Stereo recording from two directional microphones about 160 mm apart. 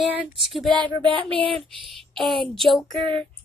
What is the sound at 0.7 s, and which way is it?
Speech, 30° right (ahead or behind).